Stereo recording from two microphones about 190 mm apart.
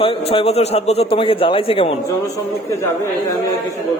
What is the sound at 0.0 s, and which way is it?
A man's voice, 30° left (ahead or behind).